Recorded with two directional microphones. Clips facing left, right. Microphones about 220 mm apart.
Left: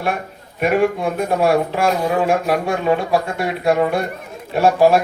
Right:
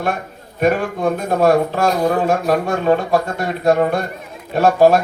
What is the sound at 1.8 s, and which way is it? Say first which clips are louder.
Speech: right 1 dB; 40° right (ahead or behind).